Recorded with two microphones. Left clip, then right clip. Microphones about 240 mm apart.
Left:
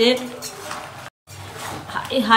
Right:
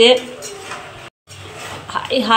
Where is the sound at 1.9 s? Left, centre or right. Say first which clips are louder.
Right 2 dB; centre.